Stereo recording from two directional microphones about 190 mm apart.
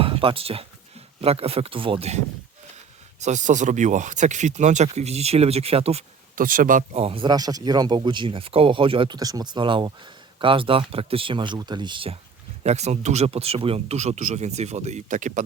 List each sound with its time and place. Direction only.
0.0 s speech: 30° right (ahead or behind)
6.4 s speech: 45° right (ahead or behind); by 12.1 s 25° right (ahead or behind)
12.6 s speech: 35° right (ahead or behind)